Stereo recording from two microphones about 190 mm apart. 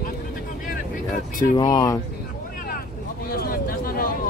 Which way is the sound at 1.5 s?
20° left (ahead or behind).